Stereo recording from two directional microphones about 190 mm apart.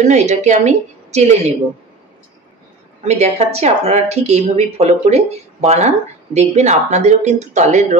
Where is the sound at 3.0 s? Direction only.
35° right (ahead or behind).